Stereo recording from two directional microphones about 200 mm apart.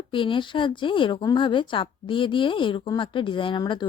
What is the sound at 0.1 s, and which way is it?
Speech, 25° left (ahead or behind).